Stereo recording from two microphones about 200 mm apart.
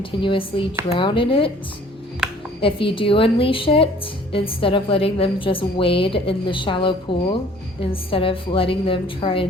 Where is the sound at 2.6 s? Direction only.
25° left (ahead or behind).